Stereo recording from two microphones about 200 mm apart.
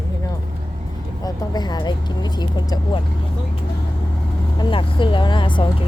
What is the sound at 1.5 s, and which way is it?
Speech, 20° left (ahead or behind).